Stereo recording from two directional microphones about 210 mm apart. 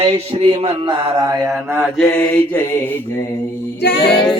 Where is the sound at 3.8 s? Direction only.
50° left (ahead or behind).